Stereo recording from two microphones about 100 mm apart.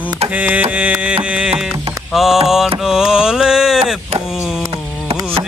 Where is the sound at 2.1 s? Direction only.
5° right (ahead or behind).